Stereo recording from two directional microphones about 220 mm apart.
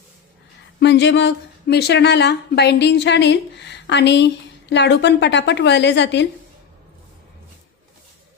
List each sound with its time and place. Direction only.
0.8 s speech: 55° left (ahead or behind)